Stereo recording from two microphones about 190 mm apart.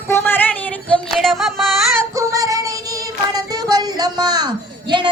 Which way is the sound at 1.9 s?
15° right (ahead or behind).